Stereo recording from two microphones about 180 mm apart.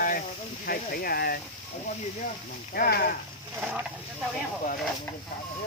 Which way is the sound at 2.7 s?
55° left (ahead or behind).